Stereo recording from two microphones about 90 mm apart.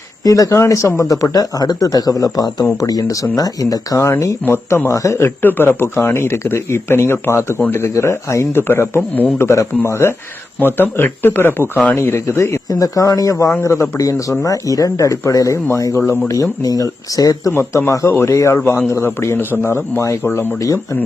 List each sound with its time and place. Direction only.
0.3 s speech: 35° left (ahead or behind)
4.4 s speech: 25° left (ahead or behind)
5.4 s speech: 20° left (ahead or behind); by 17.5 s 40° left (ahead or behind)
17.5 s speech: 30° left (ahead or behind)